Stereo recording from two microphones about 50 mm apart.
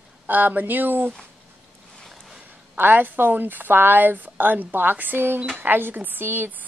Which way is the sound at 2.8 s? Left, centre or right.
Right.